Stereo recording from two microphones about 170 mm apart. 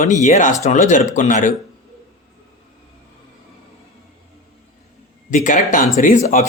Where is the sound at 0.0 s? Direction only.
45° left (ahead or behind).